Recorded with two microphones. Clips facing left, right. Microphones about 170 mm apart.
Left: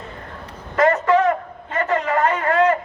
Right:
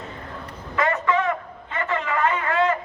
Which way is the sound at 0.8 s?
40° left (ahead or behind).